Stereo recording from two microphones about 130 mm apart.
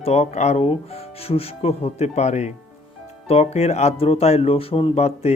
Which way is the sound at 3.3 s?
55° left (ahead or behind).